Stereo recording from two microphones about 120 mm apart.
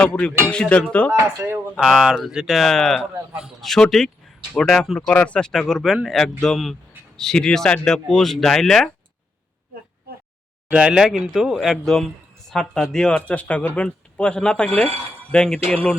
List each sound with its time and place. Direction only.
0.0 s speech: 10° left (ahead or behind)
1.4 s speech: 25° right (ahead or behind)
1.7 s speech: 5° right (ahead or behind)
10.7 s speech: 10° right (ahead or behind); by 16.0 s 10° left (ahead or behind)